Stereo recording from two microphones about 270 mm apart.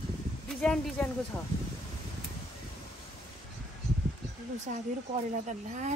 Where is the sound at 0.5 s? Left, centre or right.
Centre.